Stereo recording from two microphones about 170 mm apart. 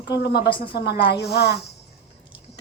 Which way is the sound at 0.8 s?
80° left.